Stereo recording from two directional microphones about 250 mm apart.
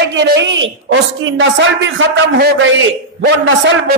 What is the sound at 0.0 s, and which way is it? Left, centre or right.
A man's voice, right.